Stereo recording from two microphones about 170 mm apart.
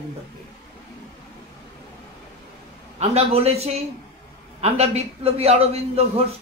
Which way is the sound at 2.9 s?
40° right (ahead or behind).